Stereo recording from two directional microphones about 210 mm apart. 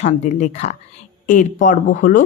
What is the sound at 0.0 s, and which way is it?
A woman's voice, 35° left (ahead or behind).